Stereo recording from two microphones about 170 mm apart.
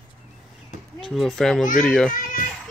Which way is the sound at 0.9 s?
Centre (ahead or behind).